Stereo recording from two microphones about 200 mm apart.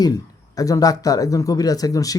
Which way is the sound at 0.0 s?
20° left (ahead or behind).